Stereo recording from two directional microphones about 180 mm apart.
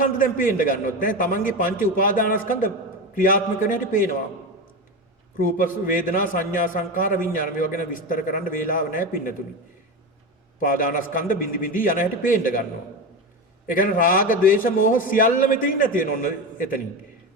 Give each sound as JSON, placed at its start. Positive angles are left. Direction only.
{"t": 0.0, "sound": "a man's voice", "side_deg": 50}
{"t": 5.4, "sound": "a man's voice", "side_deg": 50}
{"t": 10.6, "sound": "a man's voice", "side_deg": 50}
{"t": 13.7, "sound": "a man's voice", "side_deg": 50}